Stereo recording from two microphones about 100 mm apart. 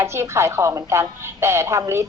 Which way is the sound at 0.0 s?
25° right (ahead or behind).